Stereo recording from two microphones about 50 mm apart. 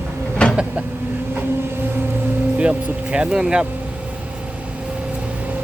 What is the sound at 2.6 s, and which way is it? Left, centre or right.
Speech, right.